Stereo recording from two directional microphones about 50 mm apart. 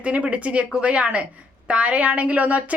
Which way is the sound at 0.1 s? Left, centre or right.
Right.